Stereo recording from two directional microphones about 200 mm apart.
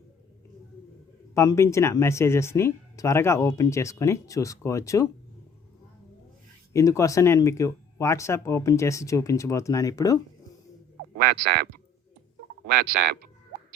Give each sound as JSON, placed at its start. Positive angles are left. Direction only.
{"t": 1.3, "sound": "speech", "side_deg": 15}
{"t": 6.7, "sound": "speech", "side_deg": 15}
{"t": 12.6, "sound": "speech", "side_deg": -55}